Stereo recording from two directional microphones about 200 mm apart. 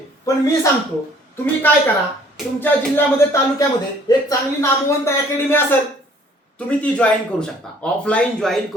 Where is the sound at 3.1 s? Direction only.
15° left (ahead or behind).